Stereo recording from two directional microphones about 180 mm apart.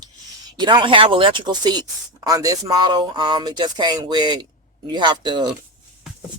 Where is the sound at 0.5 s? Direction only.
25° right (ahead or behind).